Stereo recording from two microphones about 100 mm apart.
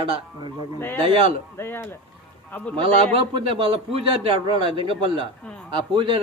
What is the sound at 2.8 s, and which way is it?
A man's voice, 55° right (ahead or behind).